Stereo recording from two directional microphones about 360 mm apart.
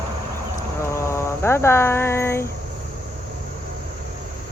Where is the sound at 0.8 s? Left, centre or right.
Centre.